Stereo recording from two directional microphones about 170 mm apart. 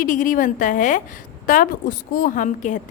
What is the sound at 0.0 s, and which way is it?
Speech, 50° left (ahead or behind).